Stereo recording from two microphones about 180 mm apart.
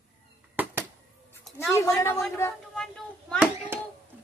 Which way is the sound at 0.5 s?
10° right (ahead or behind).